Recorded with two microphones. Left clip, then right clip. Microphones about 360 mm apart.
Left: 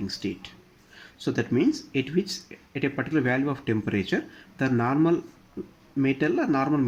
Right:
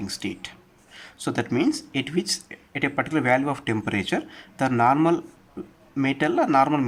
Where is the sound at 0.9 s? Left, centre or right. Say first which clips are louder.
Right 1 dB; right.